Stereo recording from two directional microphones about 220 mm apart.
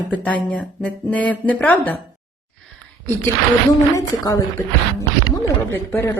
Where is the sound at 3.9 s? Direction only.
15° left (ahead or behind).